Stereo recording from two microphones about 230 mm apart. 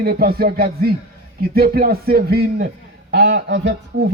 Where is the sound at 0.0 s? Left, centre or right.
Right.